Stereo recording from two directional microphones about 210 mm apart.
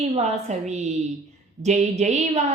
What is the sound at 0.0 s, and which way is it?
Speech, 30° right (ahead or behind).